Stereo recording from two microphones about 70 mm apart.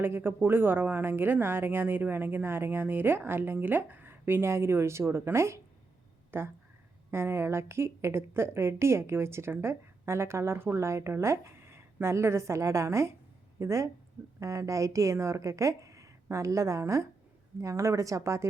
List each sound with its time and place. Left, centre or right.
0.0 s a woman's voice: right